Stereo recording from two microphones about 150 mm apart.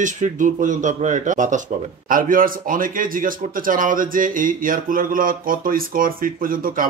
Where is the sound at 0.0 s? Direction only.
55° right (ahead or behind).